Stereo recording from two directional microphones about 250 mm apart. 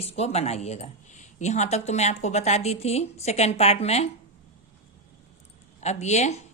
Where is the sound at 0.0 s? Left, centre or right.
Left.